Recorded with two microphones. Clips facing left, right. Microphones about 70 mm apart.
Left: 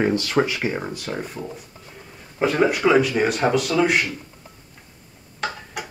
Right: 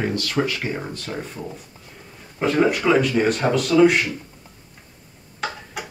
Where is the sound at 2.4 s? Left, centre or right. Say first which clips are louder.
Even; centre.